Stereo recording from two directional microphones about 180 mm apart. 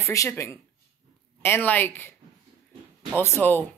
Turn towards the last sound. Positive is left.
turn(degrees=10)  # may be behind; listen again after turning